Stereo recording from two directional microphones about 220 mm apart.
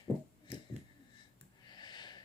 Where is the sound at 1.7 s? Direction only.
20° left (ahead or behind).